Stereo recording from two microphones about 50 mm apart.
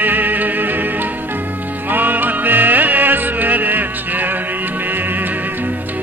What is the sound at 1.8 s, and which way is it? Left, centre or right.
Music, right.